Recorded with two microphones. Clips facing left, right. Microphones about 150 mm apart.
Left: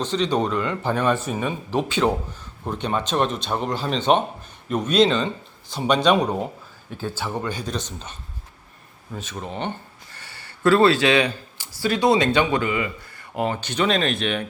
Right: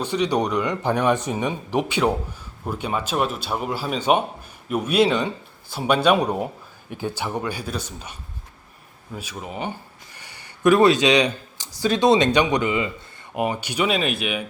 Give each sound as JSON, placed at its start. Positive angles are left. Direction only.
{"t": 0.0, "sound": "speech", "side_deg": -10}